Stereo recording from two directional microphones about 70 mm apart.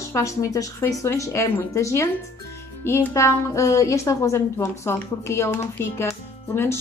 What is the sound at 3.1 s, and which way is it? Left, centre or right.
A woman's voice, left.